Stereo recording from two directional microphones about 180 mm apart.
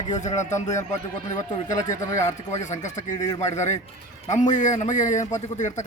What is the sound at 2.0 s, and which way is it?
Speech, 15° left (ahead or behind).